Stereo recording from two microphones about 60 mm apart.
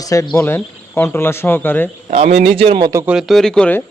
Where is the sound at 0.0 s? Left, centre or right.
Left.